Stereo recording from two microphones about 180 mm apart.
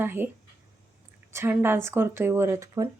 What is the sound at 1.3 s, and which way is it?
Speech, 10° right (ahead or behind).